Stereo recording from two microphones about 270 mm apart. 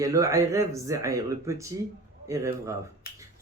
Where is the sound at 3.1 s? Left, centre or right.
Left.